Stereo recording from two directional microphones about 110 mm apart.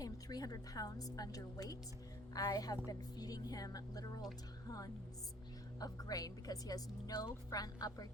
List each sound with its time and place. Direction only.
0.0 s a woman's voice: 35° left (ahead or behind)
5.8 s a woman's voice: 35° left (ahead or behind)